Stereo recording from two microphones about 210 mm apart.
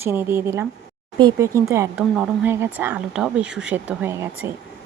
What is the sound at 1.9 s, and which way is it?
Speech, 5° right (ahead or behind).